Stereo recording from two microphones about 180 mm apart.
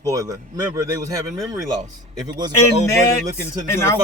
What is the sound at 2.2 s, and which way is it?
Speech, 20° right (ahead or behind).